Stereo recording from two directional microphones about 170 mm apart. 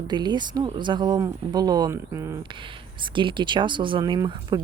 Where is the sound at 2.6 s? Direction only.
30° right (ahead or behind).